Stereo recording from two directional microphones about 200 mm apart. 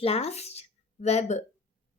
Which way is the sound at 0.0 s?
30° left (ahead or behind).